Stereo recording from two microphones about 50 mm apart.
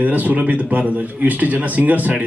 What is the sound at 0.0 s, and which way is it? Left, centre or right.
Speech, right.